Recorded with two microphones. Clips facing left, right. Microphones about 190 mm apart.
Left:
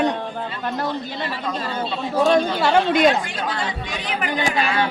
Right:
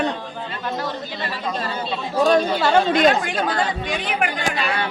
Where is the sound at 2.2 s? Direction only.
10° left (ahead or behind).